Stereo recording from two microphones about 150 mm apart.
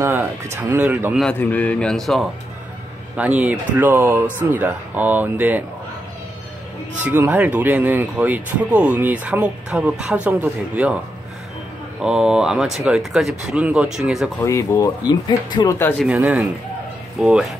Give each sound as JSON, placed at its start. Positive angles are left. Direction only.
{"t": 0.0, "sound": "speech", "side_deg": -15}
{"t": 1.2, "sound": "speech", "side_deg": 10}
{"t": 3.2, "sound": "speech", "side_deg": -10}
{"t": 7.0, "sound": "speech", "side_deg": -10}
{"t": 12.0, "sound": "speech", "side_deg": -5}
{"t": 14.4, "sound": "speech", "side_deg": 20}
{"t": 16.1, "sound": "speech", "side_deg": -10}